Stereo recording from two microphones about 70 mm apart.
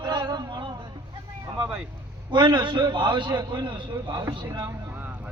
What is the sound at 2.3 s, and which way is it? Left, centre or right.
A man's voice, right.